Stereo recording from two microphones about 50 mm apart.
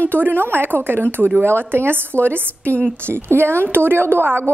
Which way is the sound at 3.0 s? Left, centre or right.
Right.